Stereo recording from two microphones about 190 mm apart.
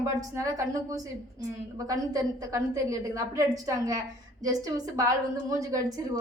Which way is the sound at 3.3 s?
15° right (ahead or behind).